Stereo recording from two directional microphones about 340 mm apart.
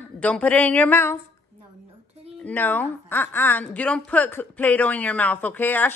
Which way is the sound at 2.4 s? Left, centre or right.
Centre.